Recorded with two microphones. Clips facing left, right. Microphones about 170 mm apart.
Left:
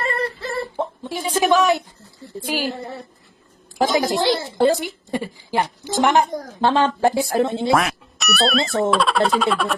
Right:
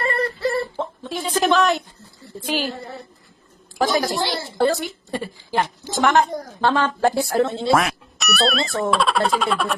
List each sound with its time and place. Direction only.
0.8 s a woman's voice: 10° left (ahead or behind)
3.8 s a woman's voice: 20° left (ahead or behind)
7.7 s speech: centre (ahead or behind)